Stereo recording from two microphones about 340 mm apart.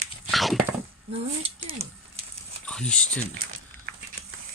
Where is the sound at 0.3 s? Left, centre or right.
Centre.